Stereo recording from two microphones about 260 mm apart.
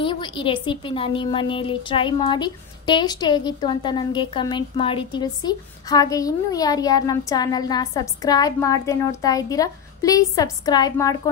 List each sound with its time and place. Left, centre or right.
0.0 s a woman's voice: centre